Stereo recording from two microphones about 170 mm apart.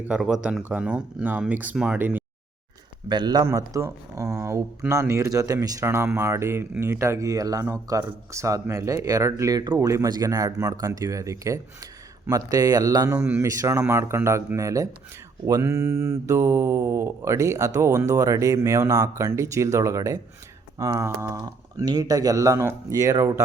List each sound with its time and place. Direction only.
0.1 s speech: 5° right (ahead or behind)
0.6 s mantra: 10° right (ahead or behind)
3.1 s speech: 25° right (ahead or behind)
13.1 s mantra: 10° right (ahead or behind)
20.7 s speech: 20° right (ahead or behind)